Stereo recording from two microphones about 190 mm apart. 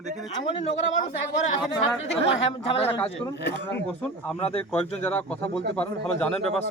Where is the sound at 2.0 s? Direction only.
80° left.